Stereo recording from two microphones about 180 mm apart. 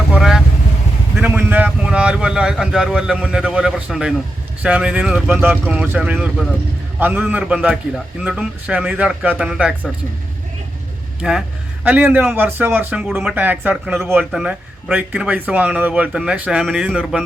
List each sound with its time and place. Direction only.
0.1 s vehicle: 5° right (ahead or behind)
1.2 s speech: 10° right (ahead or behind)
11.2 s speech: 5° right (ahead or behind)